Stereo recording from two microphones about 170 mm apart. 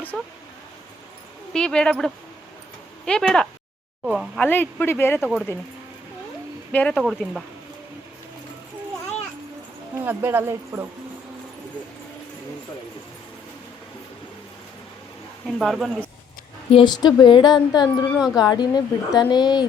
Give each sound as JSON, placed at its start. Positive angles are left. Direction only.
{"t": 0.1, "sound": "speech", "side_deg": 5}
{"t": 1.5, "sound": "speech", "side_deg": 5}
{"t": 4.4, "sound": "speech", "side_deg": 10}
{"t": 5.2, "sound": "speech", "side_deg": 0}
{"t": 6.7, "sound": "speech", "side_deg": 5}
{"t": 10.1, "sound": "speech", "side_deg": -15}
{"t": 15.4, "sound": "speech", "side_deg": 0}
{"t": 16.7, "sound": "speech", "side_deg": 25}